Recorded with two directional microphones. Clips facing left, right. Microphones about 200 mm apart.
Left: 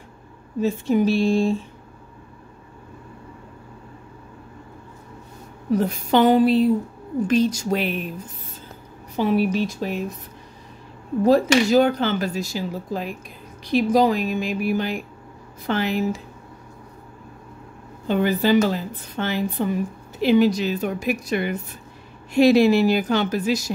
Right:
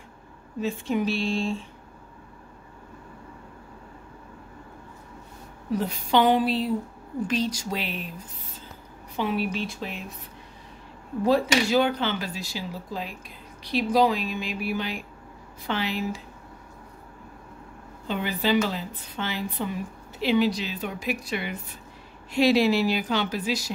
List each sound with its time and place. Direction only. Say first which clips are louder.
0.6 s a woman's voice: left 6 dB; 40° left (ahead or behind)
5.8 s a woman's voice: left 4 dB; 45° left (ahead or behind)
9.1 s speech: left 7 dB; 40° left (ahead or behind)
11.2 s a woman's voice: left 5 dB; 45° left (ahead or behind)
18.0 s a woman's voice: left 7 dB; 45° left (ahead or behind)